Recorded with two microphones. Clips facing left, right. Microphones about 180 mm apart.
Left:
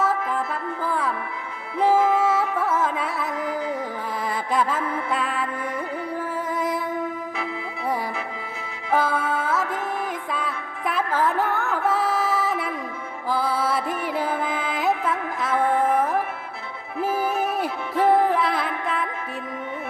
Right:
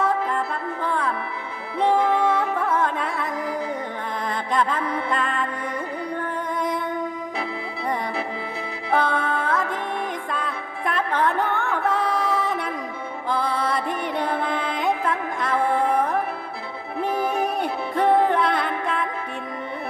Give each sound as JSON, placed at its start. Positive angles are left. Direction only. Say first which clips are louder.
{"t": 0.0, "sound": "music", "louder": "right 1 dB", "side_deg": 5}
{"t": 1.8, "sound": "carnatic music", "louder": "left 1 dB", "side_deg": 5}
{"t": 4.3, "sound": "music", "louder": "even", "side_deg": 5}
{"t": 8.9, "sound": "music", "louder": "even", "side_deg": 5}